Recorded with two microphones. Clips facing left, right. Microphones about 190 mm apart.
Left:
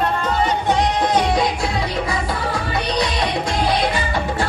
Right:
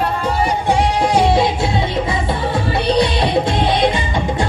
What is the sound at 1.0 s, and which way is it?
Music, 30° right (ahead or behind).